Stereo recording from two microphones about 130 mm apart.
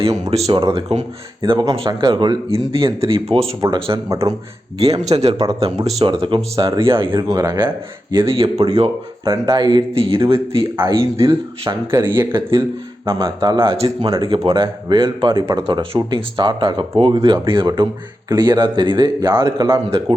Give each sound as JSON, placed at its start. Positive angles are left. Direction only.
{"t": 0.3, "sound": "speech", "side_deg": -50}
{"t": 1.4, "sound": "speech", "side_deg": -35}
{"t": 4.1, "sound": "speech", "side_deg": -25}
{"t": 4.8, "sound": "speech", "side_deg": -50}
{"t": 7.3, "sound": "speech", "side_deg": -25}
{"t": 8.3, "sound": "speech", "side_deg": -45}
{"t": 9.2, "sound": "speech", "side_deg": -30}
{"t": 10.8, "sound": "speech", "side_deg": -20}
{"t": 12.3, "sound": "speech", "side_deg": -40}